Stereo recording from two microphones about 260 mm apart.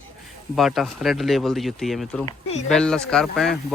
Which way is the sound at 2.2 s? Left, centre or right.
Left.